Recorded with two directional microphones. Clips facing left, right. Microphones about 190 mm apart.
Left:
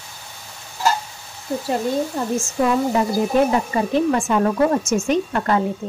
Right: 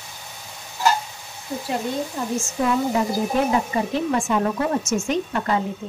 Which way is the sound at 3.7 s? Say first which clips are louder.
Left 4 dB; 50° left (ahead or behind).